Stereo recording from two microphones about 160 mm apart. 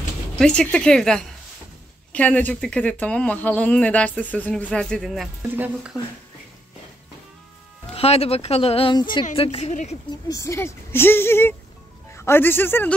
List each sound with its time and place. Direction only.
0.4 s speech: 5° left (ahead or behind)
7.9 s a woman's voice: 40° left (ahead or behind)
10.0 s a man's voice: 20° left (ahead or behind)